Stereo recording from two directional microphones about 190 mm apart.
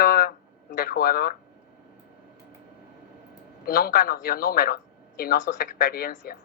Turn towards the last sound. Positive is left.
turn(degrees=50)  # may be behind; listen again after turning